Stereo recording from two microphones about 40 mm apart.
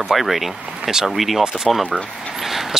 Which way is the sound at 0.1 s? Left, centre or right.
Centre.